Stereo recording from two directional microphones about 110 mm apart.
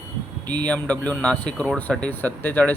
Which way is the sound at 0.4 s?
40° right (ahead or behind).